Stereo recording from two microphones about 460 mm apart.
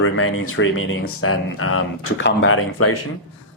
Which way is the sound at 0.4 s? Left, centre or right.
Left.